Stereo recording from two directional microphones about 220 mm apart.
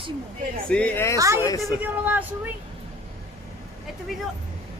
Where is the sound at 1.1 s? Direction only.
15° right (ahead or behind).